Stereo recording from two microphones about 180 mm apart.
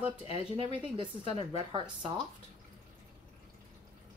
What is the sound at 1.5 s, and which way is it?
Speech, 25° right (ahead or behind).